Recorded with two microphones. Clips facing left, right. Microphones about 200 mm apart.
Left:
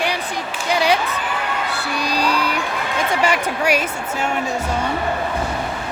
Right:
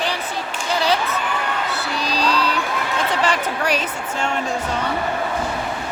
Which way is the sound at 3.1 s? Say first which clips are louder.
Left 3 dB; 10° left (ahead or behind).